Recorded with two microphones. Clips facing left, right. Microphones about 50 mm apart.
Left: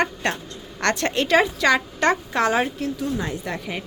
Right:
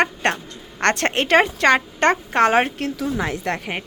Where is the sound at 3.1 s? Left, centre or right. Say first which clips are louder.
Right 4 dB; right.